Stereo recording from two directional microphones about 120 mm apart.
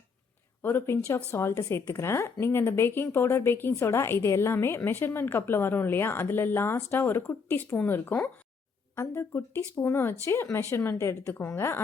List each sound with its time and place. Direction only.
0.6 s a woman's voice: 15° left (ahead or behind)